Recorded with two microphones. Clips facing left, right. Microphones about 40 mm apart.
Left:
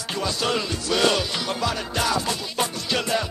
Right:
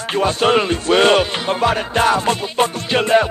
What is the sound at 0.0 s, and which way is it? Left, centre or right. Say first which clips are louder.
Music: right 9 dB; right.